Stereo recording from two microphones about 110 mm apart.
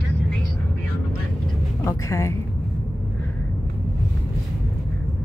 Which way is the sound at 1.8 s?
25° left (ahead or behind).